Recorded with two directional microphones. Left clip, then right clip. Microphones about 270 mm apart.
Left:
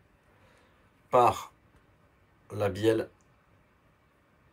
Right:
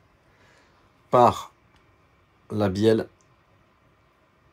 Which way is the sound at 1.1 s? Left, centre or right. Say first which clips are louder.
Right 5 dB; right.